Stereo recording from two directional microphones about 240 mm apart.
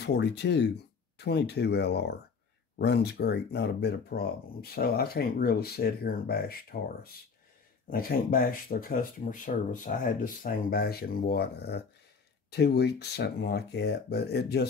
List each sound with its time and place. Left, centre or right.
0.0 s speech: left